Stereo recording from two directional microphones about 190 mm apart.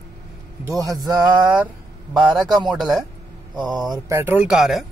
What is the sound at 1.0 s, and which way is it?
Speech, 5° right (ahead or behind).